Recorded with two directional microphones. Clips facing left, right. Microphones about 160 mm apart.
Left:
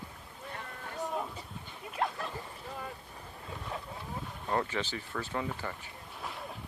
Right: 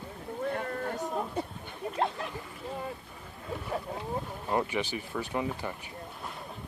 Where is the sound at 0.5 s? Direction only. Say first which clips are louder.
Right 11 dB; 55° right (ahead or behind).